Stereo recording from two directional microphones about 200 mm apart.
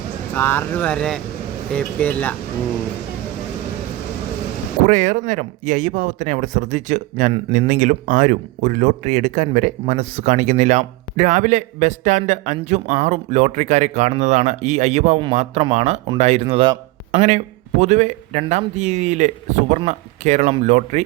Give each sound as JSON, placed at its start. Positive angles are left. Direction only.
{"t": 0.3, "sound": "speech", "side_deg": 10}
{"t": 4.8, "sound": "speech", "side_deg": -40}